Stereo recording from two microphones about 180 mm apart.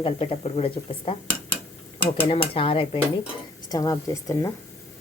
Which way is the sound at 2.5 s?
30° left (ahead or behind).